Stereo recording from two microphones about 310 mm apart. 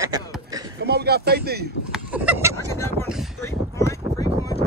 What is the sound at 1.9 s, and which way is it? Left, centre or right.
Speech, centre.